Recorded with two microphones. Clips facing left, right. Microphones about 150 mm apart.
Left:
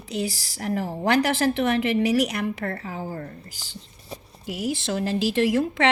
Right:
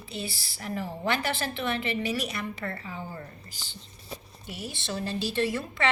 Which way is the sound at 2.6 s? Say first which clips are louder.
Left 6 dB; 50° left (ahead or behind).